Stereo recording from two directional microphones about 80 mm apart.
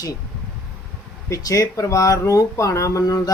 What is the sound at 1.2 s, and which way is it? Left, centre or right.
Speech, left.